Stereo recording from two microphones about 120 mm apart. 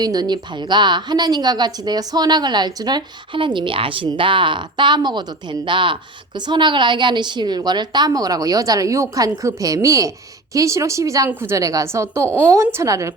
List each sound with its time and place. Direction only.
0.0 s a woman's voice: 35° right (ahead or behind)